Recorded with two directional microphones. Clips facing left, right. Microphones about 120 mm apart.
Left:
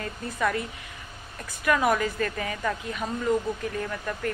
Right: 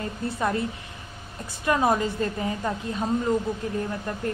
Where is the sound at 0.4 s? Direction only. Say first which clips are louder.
Even; 30° right (ahead or behind).